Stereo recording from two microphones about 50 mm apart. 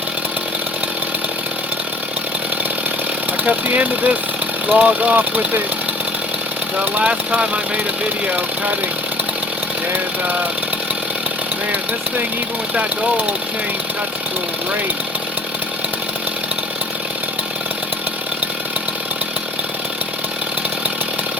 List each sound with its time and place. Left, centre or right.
3.3 s speech: right
6.7 s speech: right